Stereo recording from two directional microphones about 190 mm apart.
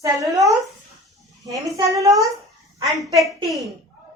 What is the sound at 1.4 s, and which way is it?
A woman's voice, 15° right (ahead or behind).